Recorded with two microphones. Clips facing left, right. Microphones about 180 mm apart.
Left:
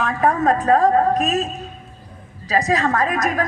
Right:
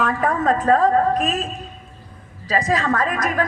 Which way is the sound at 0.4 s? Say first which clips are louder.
Even; 45° left (ahead or behind).